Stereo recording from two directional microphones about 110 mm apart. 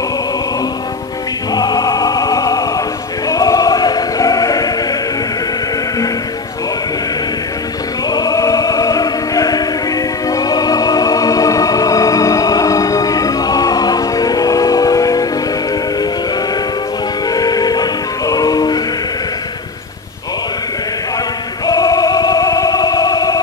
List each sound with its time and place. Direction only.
1.5 s music: 35° left (ahead or behind)
3.3 s choir: 35° left (ahead or behind)
8.1 s music: 35° left (ahead or behind)
17.3 s music: 35° left (ahead or behind)
21.6 s music: 35° left (ahead or behind)